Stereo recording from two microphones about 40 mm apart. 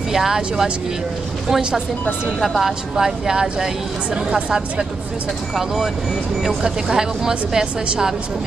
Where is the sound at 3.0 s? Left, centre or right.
Centre.